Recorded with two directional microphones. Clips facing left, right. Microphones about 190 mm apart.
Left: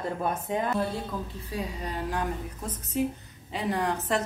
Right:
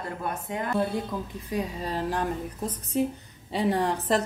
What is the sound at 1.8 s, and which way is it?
Speech, 30° right (ahead or behind).